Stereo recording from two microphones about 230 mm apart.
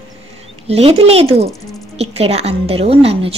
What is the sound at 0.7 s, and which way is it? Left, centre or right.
A woman's voice, right.